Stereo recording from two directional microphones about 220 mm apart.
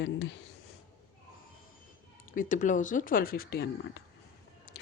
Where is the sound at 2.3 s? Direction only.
35° left (ahead or behind).